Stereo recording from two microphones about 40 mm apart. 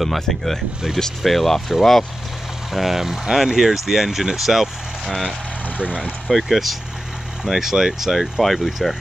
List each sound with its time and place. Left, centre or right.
0.0 s speech: centre
0.9 s speech: centre
1.2 s speech: centre
2.7 s speech: centre
5.8 s speech: right
6.2 s speech: centre